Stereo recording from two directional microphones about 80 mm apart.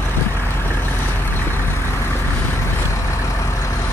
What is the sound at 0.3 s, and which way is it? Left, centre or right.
Vehicle, left.